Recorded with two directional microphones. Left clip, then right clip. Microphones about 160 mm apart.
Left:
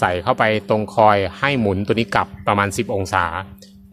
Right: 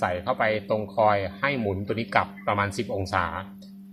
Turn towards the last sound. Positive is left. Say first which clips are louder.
# left 7 dB
turn(degrees=55)  # may be behind; listen again after turning